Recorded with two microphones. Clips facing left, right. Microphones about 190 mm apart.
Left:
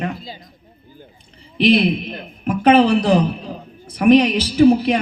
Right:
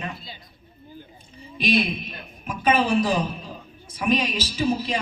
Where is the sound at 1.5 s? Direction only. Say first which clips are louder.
Left 8 dB; 65° left (ahead or behind).